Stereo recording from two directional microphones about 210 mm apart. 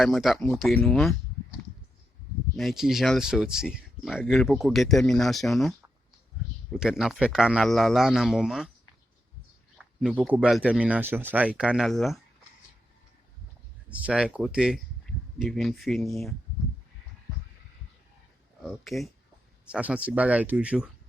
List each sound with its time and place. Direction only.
0.0 s speech: centre (ahead or behind)
2.6 s speech: centre (ahead or behind)
6.7 s speech: 5° right (ahead or behind)
9.7 s speech: 5° right (ahead or behind)
13.9 s speech: 5° right (ahead or behind)
18.6 s speech: centre (ahead or behind)